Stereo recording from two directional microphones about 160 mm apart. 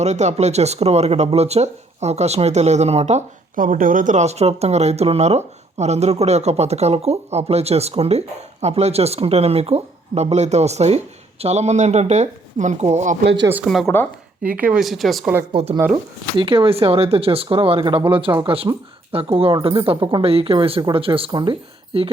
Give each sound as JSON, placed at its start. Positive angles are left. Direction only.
{"t": 0.0, "sound": "speech", "side_deg": -45}
{"t": 3.5, "sound": "speech", "side_deg": -60}
{"t": 13.2, "sound": "speech", "side_deg": -90}
{"t": 13.7, "sound": "speech", "side_deg": 0}
{"t": 14.4, "sound": "speech", "side_deg": -10}
{"t": 15.6, "sound": "speech", "side_deg": -40}